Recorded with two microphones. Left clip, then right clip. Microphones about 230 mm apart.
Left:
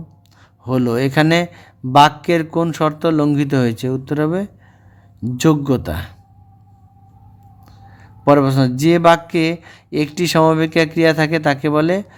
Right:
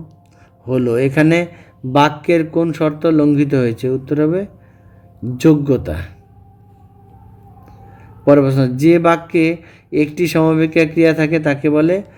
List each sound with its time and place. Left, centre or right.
0.6 s speech: left
7.6 s speech: left